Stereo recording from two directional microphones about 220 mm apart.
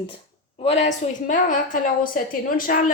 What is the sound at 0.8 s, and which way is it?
A woman's voice, 35° left (ahead or behind).